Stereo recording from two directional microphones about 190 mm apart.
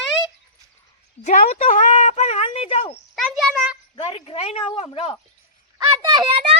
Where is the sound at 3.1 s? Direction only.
Centre (ahead or behind).